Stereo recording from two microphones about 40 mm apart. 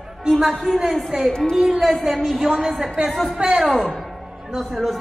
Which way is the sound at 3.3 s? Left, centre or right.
Right.